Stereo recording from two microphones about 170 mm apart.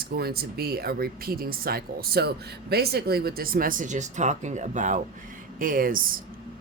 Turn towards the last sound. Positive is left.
turn(degrees=-55)  # may be behind; listen again after turning